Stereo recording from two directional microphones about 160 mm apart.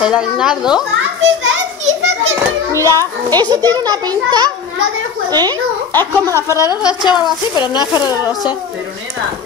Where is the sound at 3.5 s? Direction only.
25° right (ahead or behind).